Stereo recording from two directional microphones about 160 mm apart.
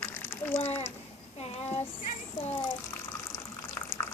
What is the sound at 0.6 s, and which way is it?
Speech, 40° left (ahead or behind).